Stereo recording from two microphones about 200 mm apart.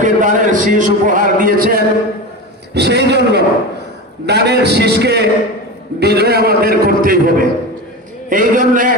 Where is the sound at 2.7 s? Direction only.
55° right (ahead or behind).